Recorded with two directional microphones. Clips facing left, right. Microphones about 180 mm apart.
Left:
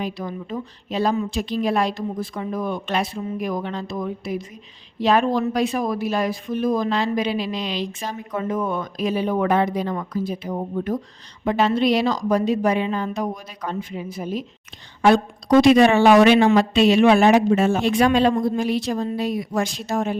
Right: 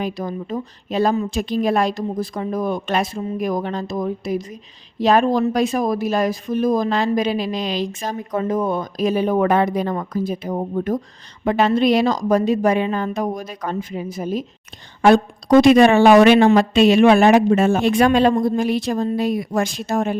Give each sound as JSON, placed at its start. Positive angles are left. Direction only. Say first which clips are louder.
{"t": 0.0, "sound": "speech", "louder": "right 3 dB", "side_deg": -40}